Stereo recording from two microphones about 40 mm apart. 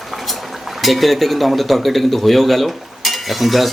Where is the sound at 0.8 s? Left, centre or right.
Centre.